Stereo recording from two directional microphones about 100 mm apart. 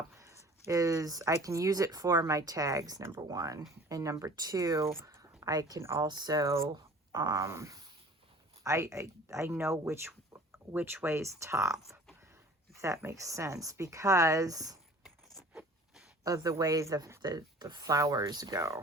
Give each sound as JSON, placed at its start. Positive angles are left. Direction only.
{"t": 0.7, "sound": "a woman's voice", "side_deg": -30}
{"t": 6.1, "sound": "speech", "side_deg": -45}
{"t": 12.8, "sound": "speech", "side_deg": -30}
{"t": 16.2, "sound": "speech", "side_deg": -35}